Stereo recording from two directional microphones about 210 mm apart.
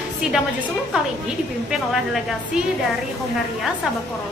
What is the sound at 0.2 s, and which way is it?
Speech, 5° right (ahead or behind).